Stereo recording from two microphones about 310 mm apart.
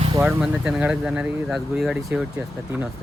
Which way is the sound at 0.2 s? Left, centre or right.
Centre.